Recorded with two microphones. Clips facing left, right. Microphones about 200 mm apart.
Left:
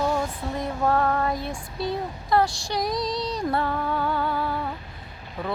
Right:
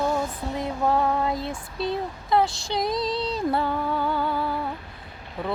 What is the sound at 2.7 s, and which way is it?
Child singing, 25° right (ahead or behind).